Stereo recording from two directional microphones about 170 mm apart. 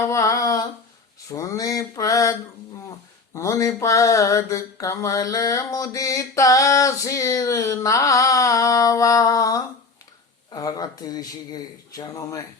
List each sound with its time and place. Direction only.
0.0 s humming: 20° left (ahead or behind)
1.3 s mantra: 20° left (ahead or behind)
3.3 s mantra: 20° left (ahead or behind)